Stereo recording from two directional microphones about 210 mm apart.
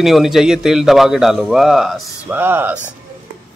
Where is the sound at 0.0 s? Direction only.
Centre (ahead or behind).